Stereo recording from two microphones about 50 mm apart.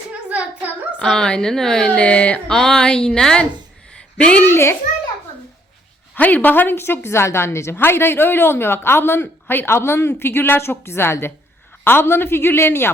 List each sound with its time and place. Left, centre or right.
0.1 s a sound: right
1.1 s a woman's voice: centre
1.9 s speech: left
2.5 s a woman's voice: centre
4.4 s a woman's voice: left
6.1 s a woman's voice: left
7.8 s speech: left